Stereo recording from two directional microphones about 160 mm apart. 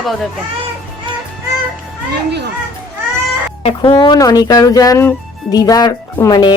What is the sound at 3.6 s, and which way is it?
Speech, 35° left (ahead or behind).